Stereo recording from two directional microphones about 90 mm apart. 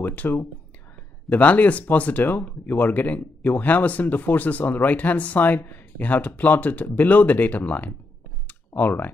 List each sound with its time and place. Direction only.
0.0 s speech: 20° left (ahead or behind)
8.5 s clicking: 20° left (ahead or behind)